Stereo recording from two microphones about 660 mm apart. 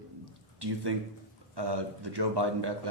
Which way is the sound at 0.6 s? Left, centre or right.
Right.